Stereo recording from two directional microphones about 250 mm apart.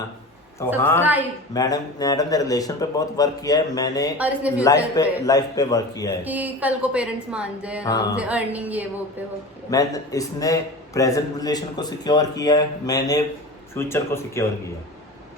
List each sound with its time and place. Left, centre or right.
0.8 s a man's voice: centre
4.2 s a woman's voice: centre
4.5 s a man's voice: centre
6.2 s a woman's voice: centre
9.6 s a man's voice: centre